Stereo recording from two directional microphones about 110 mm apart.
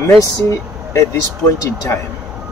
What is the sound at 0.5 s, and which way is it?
Speech, 25° left (ahead or behind).